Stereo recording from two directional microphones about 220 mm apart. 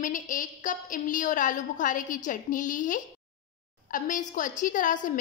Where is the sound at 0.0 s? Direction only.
35° left (ahead or behind).